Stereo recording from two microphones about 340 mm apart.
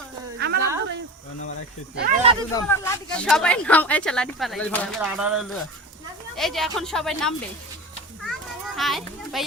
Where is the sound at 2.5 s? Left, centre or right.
Centre.